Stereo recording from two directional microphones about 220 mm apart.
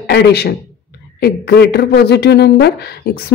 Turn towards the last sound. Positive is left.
turn(degrees=45)  # may be behind; listen again after turning